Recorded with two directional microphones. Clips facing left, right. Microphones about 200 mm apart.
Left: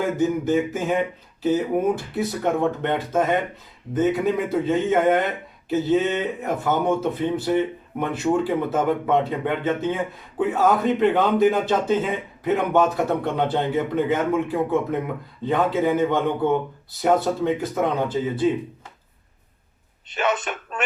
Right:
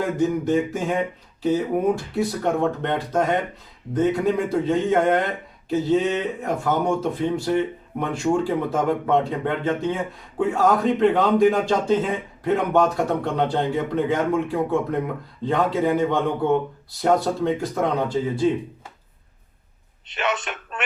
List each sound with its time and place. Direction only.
0.2 s speech: 5° left (ahead or behind)
20.1 s speech: 40° left (ahead or behind)